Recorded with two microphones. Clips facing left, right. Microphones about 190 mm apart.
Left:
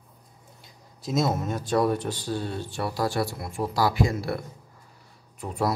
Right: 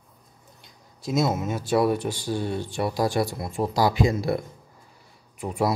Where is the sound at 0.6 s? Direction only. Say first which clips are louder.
Left 1 dB; centre (ahead or behind).